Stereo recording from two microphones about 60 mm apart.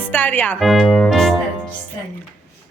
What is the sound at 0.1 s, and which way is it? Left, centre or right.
Speech, left.